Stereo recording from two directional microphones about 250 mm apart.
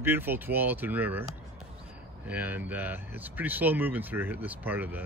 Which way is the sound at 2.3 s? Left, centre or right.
Centre.